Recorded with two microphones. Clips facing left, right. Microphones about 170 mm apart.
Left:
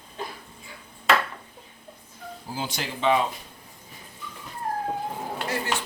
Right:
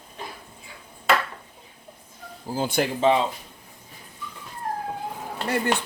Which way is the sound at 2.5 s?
50° right (ahead or behind).